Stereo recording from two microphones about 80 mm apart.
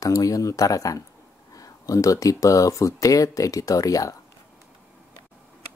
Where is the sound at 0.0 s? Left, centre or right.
Left.